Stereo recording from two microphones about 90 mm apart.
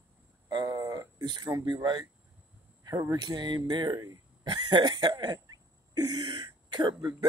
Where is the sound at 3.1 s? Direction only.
50° right (ahead or behind).